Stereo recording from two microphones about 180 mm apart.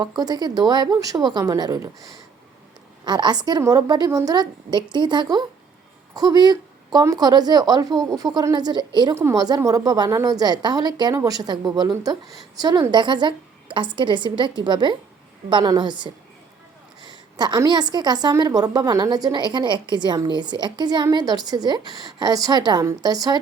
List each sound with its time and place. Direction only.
0.0 s a woman's voice: 20° right (ahead or behind)
3.0 s a woman's voice: 25° right (ahead or behind)
17.3 s a woman's voice: 25° right (ahead or behind)